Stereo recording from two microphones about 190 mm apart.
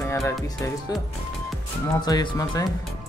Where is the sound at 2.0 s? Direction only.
20° left (ahead or behind).